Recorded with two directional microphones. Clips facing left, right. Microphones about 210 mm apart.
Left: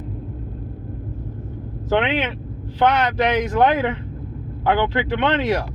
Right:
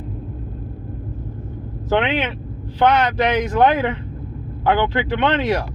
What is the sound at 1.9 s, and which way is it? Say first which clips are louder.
Speech: right 1 dB; 10° left (ahead or behind).